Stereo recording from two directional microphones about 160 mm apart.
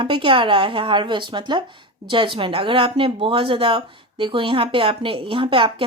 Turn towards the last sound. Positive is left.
turn(degrees=-30)  # may be behind; listen again after turning